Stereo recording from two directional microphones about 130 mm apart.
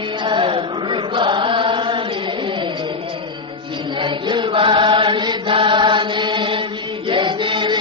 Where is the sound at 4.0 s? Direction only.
40° right (ahead or behind).